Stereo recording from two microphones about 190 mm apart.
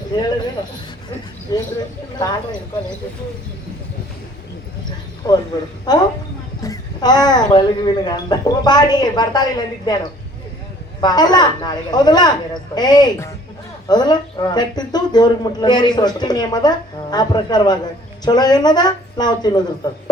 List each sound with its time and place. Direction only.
0.1 s speech: 20° left (ahead or behind)
1.5 s speech: 20° left (ahead or behind)
5.2 s speech: 20° left (ahead or behind)
11.0 s speech: 20° left (ahead or behind)